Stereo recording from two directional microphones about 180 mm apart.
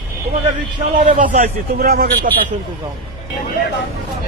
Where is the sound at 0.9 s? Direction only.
45° right (ahead or behind).